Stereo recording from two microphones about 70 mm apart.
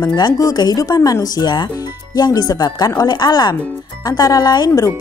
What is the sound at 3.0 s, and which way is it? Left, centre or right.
Speech, left.